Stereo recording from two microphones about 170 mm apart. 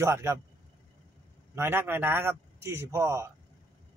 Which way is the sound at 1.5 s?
15° right (ahead or behind).